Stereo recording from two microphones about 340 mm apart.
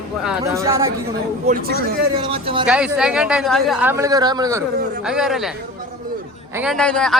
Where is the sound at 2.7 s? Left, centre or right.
Centre.